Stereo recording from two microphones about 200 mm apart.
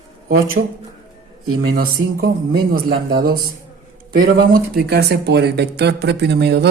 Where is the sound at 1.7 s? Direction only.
50° right (ahead or behind).